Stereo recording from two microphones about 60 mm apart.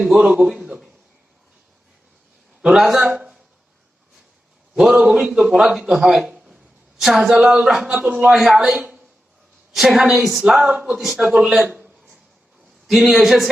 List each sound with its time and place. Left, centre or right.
0.0 s a man's voice: centre
2.6 s speech: centre
4.8 s a man's voice: centre
6.0 s a sound: centre
7.0 s a man's voice: centre
11.6 s speech: right
12.9 s a man's voice: centre